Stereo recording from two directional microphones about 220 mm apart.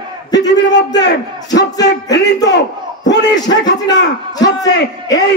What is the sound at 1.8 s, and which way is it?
Speech, 50° left (ahead or behind).